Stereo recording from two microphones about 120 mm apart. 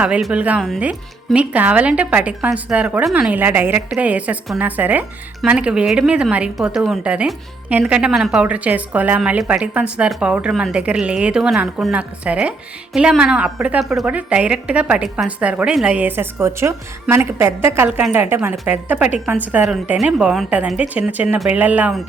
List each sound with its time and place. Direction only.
0.0 s a woman's voice: 5° right (ahead or behind)
19.6 s a woman's voice: centre (ahead or behind)